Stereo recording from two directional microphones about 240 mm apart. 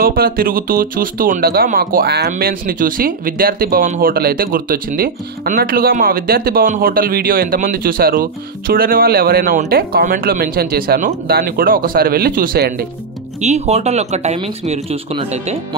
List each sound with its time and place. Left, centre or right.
0.0 s speech: right
13.4 s speech: right